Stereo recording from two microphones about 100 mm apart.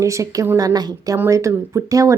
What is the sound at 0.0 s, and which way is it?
A woman's voice, 30° right (ahead or behind).